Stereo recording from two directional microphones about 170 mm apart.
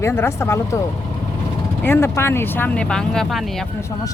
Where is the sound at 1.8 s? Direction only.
15° left (ahead or behind).